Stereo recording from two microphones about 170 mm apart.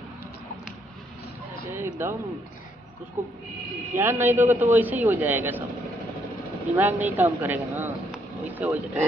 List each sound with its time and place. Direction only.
1.7 s a sound: 15° right (ahead or behind)
3.9 s speech: 15° right (ahead or behind)
6.6 s speech: 10° right (ahead or behind)